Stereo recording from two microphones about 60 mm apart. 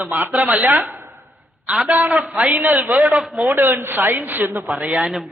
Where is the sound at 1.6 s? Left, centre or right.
Centre.